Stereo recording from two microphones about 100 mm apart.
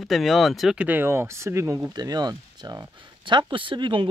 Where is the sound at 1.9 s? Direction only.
40° right (ahead or behind).